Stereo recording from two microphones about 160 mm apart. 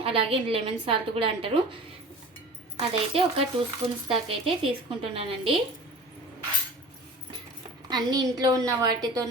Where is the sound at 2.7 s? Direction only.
40° right (ahead or behind).